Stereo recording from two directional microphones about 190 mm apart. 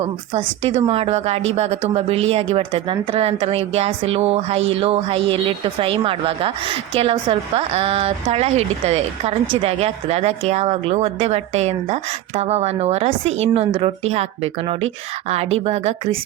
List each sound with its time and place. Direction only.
0.0 s a woman's voice: 35° right (ahead or behind)